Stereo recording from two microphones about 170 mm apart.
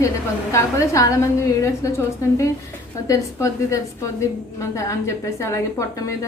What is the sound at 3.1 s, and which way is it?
A woman's voice, 20° left (ahead or behind).